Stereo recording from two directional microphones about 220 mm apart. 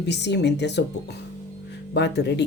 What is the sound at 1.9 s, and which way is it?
Speech, 50° left (ahead or behind).